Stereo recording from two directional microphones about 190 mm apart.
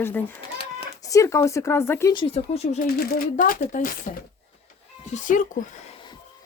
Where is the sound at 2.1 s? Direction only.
25° left (ahead or behind).